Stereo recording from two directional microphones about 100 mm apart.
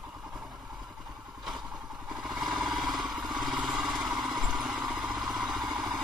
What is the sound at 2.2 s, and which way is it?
Vehicle, 5° right (ahead or behind).